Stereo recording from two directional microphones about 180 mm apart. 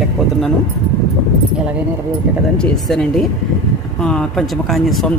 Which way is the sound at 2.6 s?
5° left (ahead or behind).